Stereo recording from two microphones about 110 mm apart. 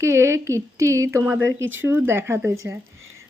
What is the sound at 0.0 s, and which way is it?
Speech, 25° right (ahead or behind).